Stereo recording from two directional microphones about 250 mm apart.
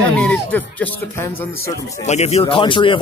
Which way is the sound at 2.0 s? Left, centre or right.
Left.